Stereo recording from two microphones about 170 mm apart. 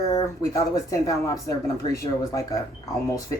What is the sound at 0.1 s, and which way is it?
A woman's voice, 20° left (ahead or behind).